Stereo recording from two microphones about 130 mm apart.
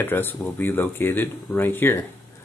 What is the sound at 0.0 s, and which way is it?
Speech, 15° left (ahead or behind).